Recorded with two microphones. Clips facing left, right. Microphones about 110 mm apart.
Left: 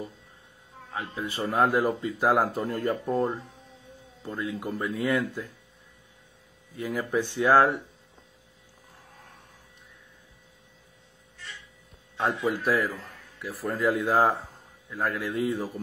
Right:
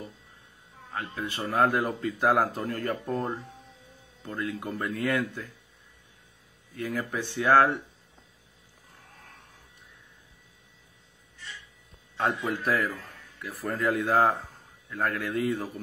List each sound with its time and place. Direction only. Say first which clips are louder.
0.9 s speech: left 1 dB; 15° left (ahead or behind)
5.1 s speech: left 2 dB; centre (ahead or behind)
6.7 s speech: left 3 dB; 15° left (ahead or behind)
12.2 s speech: left 1 dB; centre (ahead or behind)